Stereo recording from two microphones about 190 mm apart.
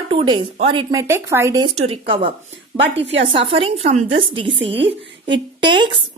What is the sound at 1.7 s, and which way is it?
A woman's voice, 30° right (ahead or behind).